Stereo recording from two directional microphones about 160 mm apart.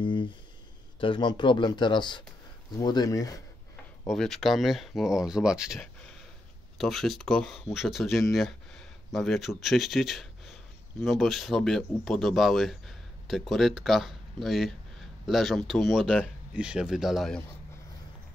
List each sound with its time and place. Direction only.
0.0 s a sound: 30° left (ahead or behind)
1.0 s speech: 30° left (ahead or behind)
4.1 s speech: centre (ahead or behind)